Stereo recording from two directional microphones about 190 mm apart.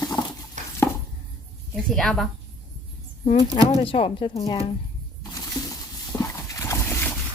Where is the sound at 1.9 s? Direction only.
Centre (ahead or behind).